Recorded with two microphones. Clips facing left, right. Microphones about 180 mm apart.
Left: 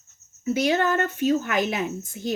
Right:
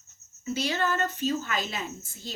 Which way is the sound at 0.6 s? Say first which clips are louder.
Left 5 dB; 55° left (ahead or behind).